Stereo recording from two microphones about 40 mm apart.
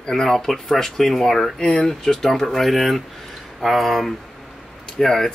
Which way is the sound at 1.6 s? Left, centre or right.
Left.